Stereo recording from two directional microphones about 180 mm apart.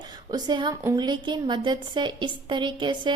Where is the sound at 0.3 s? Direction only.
25° right (ahead or behind).